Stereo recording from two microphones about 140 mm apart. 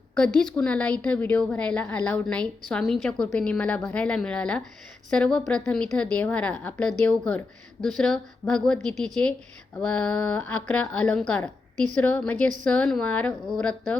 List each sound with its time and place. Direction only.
0.2 s speech: 5° left (ahead or behind)